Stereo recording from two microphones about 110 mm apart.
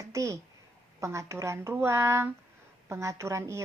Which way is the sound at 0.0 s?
30° right (ahead or behind).